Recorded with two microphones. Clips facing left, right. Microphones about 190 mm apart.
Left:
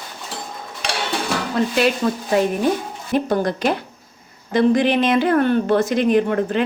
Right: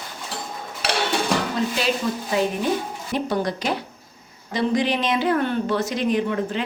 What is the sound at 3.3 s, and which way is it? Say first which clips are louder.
Speech: left 3 dB; 50° left (ahead or behind).